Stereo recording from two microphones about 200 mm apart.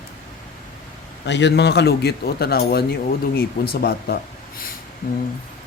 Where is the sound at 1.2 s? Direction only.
60° left (ahead or behind).